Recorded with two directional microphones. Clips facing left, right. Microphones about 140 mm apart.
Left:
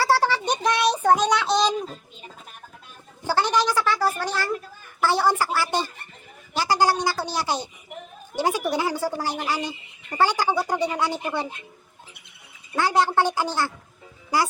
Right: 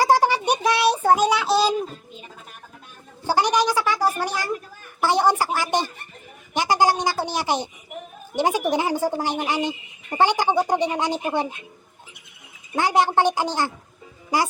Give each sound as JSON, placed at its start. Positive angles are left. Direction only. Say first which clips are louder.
{"t": 0.0, "sound": "a sound", "louder": "right 3 dB", "side_deg": -15}
{"t": 3.2, "sound": "a woman's voice", "louder": "right 2 dB", "side_deg": -15}
{"t": 12.7, "sound": "a woman's voice", "louder": "right 1 dB", "side_deg": -15}